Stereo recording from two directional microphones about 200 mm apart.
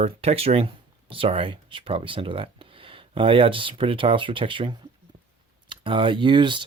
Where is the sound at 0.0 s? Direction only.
30° right (ahead or behind).